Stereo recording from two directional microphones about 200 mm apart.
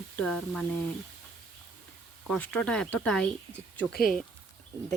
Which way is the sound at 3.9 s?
45° left (ahead or behind).